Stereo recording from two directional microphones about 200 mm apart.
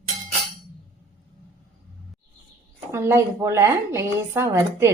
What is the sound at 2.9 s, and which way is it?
A woman's voice, 15° right (ahead or behind).